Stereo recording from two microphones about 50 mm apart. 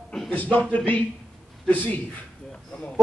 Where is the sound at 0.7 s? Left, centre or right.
Left.